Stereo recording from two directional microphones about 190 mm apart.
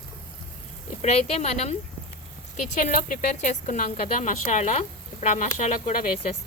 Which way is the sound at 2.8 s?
40° left (ahead or behind).